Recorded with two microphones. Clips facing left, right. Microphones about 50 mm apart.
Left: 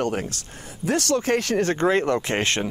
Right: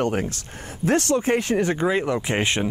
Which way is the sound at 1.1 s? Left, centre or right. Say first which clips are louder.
Right 1 dB; right.